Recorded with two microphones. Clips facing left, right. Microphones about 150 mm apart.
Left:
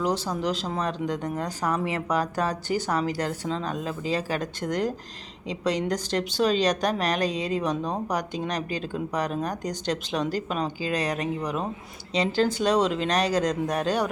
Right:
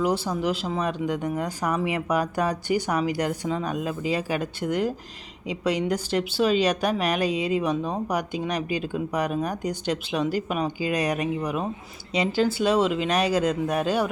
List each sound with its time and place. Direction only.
0.4 s speech: 10° right (ahead or behind)